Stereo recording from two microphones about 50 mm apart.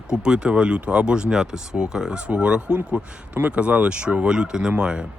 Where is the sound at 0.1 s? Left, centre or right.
Centre.